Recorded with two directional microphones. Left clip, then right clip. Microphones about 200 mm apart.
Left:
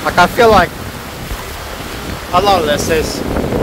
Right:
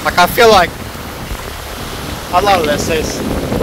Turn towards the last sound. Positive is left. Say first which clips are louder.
# left 1 dB
turn(degrees=0)  # may be behind; listen again after turning